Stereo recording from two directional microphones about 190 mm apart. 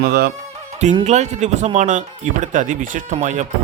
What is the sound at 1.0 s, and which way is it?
Speech, 35° right (ahead or behind).